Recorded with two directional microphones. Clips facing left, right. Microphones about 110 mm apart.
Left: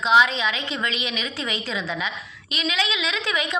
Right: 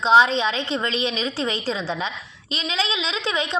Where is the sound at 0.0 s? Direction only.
35° right (ahead or behind).